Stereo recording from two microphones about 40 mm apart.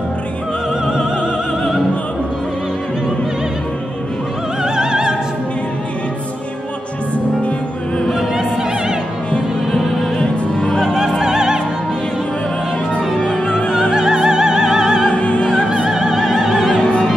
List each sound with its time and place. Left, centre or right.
4.6 s opera: centre
8.1 s opera: centre
9.7 s music: centre
10.8 s opera: centre
13.2 s opera: centre
13.7 s opera: centre
15.0 s opera: left
15.9 s opera: centre
16.7 s music: left